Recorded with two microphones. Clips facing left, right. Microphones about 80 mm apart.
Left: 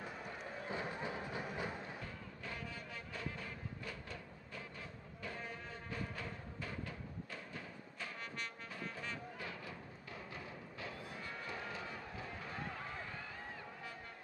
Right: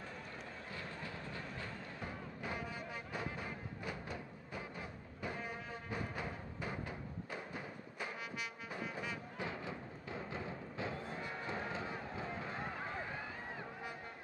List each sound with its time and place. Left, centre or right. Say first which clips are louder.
0.7 s a sound: left 7 dB; centre
2.0 s music: right 4 dB; centre
9.5 s music: right 4 dB; right